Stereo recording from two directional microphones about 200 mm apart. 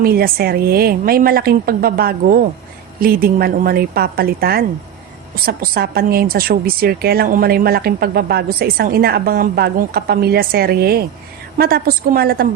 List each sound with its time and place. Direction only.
0.0 s a woman's voice: 50° right (ahead or behind)